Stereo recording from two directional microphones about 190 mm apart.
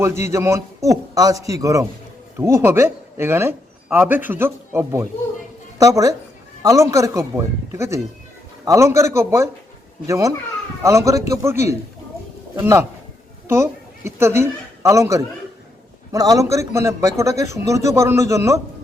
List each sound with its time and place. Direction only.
0.0 s a man's voice: 15° right (ahead or behind)